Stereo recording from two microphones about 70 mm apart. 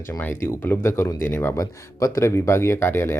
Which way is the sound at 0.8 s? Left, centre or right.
Left.